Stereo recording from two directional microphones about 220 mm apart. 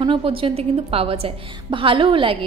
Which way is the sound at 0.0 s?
25° right (ahead or behind).